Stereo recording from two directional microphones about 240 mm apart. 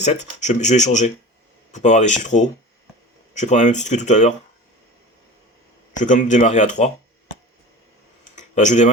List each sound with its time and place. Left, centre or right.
0.0 s speech: left
6.0 s speech: left
8.4 s a sound: left